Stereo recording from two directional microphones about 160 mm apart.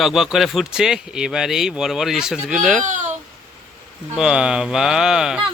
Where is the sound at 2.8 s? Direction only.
50° right (ahead or behind).